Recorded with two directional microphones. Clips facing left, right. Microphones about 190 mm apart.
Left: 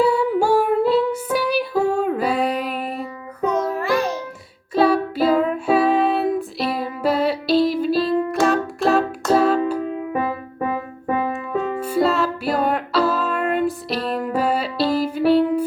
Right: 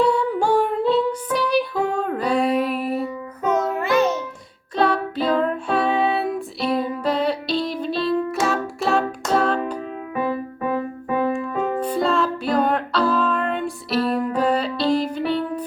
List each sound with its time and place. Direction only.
0.0 s music: 5° left (ahead or behind)
3.4 s music: 20° right (ahead or behind)
4.7 s music: 5° left (ahead or behind)
11.8 s music: 5° left (ahead or behind)